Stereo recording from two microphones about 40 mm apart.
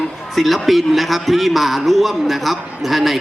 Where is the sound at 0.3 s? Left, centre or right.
Centre.